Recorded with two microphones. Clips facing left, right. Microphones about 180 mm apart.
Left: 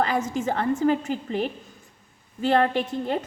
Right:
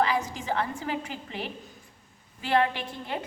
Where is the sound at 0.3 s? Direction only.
45° left (ahead or behind).